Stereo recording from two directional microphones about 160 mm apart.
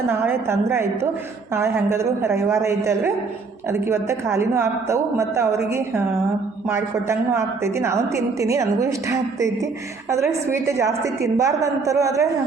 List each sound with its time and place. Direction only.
0.1 s a woman's voice: 15° right (ahead or behind)